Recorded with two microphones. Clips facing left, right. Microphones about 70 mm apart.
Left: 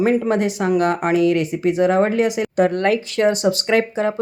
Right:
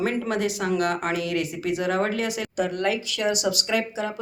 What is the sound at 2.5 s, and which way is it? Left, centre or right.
Speech, left.